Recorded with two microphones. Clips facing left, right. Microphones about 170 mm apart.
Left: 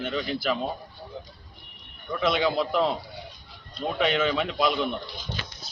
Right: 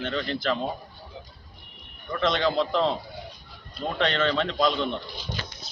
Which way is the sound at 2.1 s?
5° left (ahead or behind).